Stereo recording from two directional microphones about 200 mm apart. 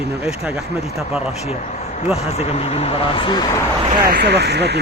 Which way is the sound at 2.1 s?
30° left (ahead or behind).